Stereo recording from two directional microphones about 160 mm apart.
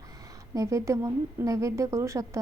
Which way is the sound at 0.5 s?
20° right (ahead or behind).